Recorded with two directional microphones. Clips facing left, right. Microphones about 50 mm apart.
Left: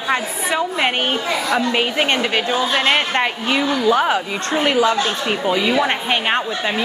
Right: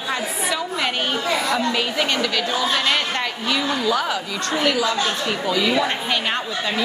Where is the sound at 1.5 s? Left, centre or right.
Left.